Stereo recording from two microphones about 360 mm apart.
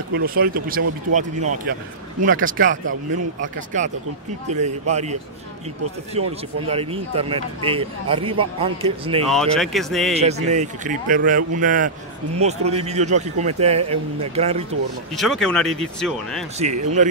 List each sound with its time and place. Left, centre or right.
0.1 s speech: right
6.2 s speech: centre
9.3 s speech: centre
10.1 s speech: centre
15.1 s speech: centre
16.8 s speech: centre